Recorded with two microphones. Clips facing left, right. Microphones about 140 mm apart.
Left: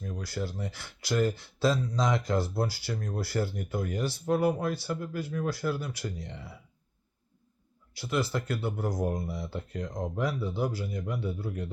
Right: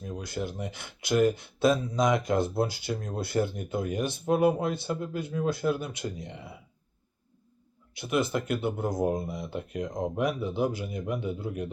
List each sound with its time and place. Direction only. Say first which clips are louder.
0.0 s speech: right 1 dB; 20° right (ahead or behind)
7.9 s speech: right 3 dB; 20° right (ahead or behind)